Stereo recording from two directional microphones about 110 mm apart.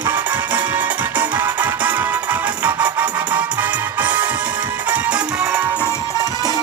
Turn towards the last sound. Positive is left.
turn(degrees=-10)  # may be behind; listen again after turning